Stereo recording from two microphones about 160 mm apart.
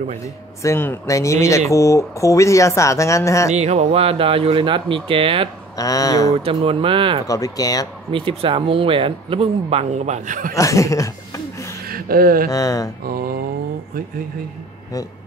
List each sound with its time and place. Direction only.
0.6 s speech: 15° left (ahead or behind)
3.5 s speech: 40° right (ahead or behind)
5.8 s speech: 20° left (ahead or behind)
6.3 s speech: 35° right (ahead or behind)
7.2 s speech: 20° left (ahead or behind)
8.1 s speech: 35° right (ahead or behind); by 10.5 s 55° right (ahead or behind)
10.5 s speech: 20° left (ahead or behind)
11.9 s a sound: 65° right (ahead or behind)
12.4 s speech: 20° left (ahead or behind)
13.0 s mantra: 65° right (ahead or behind)